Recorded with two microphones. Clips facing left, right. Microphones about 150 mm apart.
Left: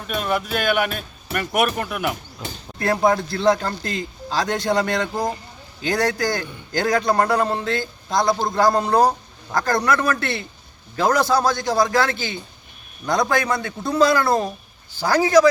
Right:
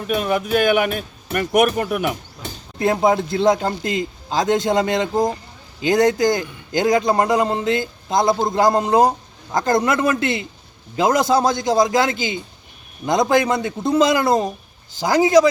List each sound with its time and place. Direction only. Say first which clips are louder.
0.1 s speech: right 4 dB; 10° right (ahead or behind)